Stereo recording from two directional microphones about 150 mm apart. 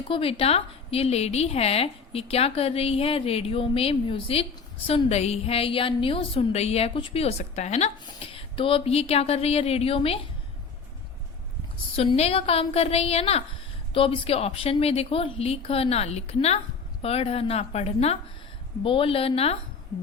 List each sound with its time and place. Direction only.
0.1 s a woman's voice: 40° left (ahead or behind)
11.9 s a woman's voice: 40° left (ahead or behind)